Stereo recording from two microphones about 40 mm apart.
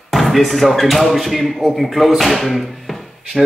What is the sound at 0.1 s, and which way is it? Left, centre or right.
Speech, centre.